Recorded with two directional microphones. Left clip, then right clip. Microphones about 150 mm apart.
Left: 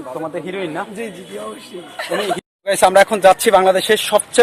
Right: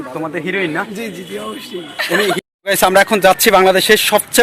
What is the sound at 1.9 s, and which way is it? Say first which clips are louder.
Speech: right 5 dB; 15° left (ahead or behind).